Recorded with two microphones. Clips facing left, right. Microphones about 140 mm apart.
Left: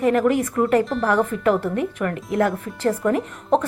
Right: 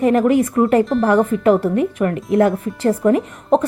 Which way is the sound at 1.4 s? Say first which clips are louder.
Right 5 dB; 20° right (ahead or behind).